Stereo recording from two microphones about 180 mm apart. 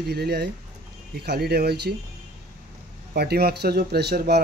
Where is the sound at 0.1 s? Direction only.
65° right (ahead or behind).